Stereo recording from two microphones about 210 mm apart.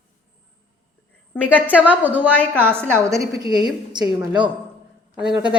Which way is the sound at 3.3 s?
20° right (ahead or behind).